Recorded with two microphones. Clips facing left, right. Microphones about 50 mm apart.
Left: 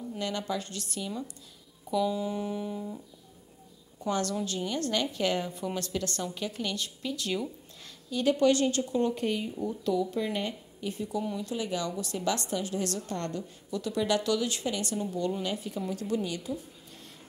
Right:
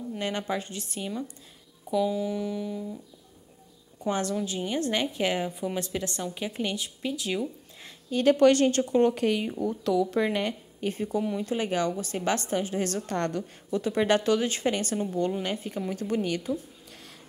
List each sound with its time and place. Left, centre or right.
0.2 s a woman's voice: right
1.9 s a sound: centre
2.3 s music: centre
4.0 s a woman's voice: centre
7.2 s a sound: centre
8.1 s speech: right
11.3 s speech: right
13.0 s a woman's voice: right
13.7 s speech: right